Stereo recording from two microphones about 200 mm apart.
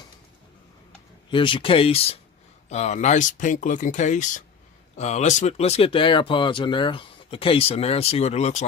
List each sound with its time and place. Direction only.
1.3 s speech: 25° left (ahead or behind)